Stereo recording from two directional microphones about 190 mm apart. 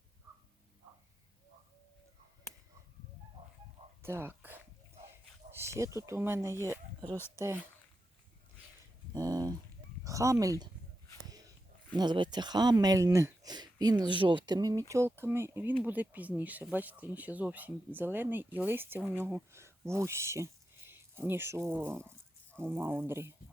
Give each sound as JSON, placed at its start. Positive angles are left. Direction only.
{"t": 4.0, "sound": "whispering", "side_deg": -10}
{"t": 5.5, "sound": "speech", "side_deg": -15}
{"t": 9.1, "sound": "a sound", "side_deg": -20}
{"t": 10.0, "sound": "speech", "side_deg": -15}
{"t": 11.3, "sound": "a sound", "side_deg": -20}
{"t": 11.9, "sound": "speech", "side_deg": -25}